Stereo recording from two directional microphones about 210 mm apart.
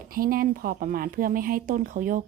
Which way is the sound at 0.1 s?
45° right (ahead or behind).